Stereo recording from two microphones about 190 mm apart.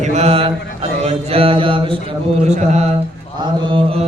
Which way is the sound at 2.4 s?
35° right (ahead or behind).